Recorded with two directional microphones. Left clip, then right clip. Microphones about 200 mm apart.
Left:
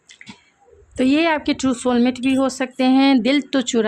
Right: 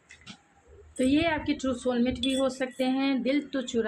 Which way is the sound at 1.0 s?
50° left (ahead or behind).